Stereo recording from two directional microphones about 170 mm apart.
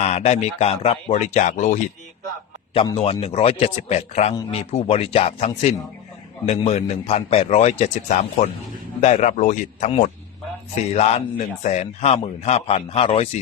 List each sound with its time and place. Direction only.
0.0 s a man's voice: 40° left (ahead or behind)